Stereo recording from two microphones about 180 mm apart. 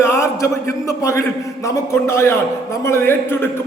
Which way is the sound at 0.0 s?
15° left (ahead or behind).